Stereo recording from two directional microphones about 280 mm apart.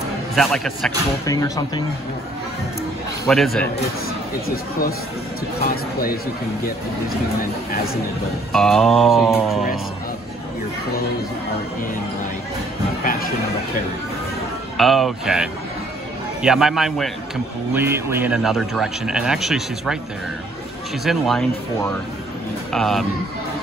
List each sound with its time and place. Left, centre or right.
0.4 s speech: centre
3.3 s speech: centre
7.7 s speech: left
8.5 s speech: centre
14.8 s speech: centre
21.0 s speech: centre
22.7 s speech: centre